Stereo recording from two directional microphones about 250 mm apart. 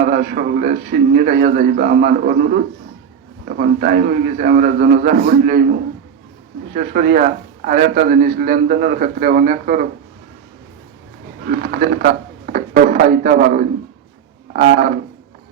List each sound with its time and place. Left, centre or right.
0.0 s a man's voice: right
6.7 s a man's voice: right
11.6 s a man's voice: right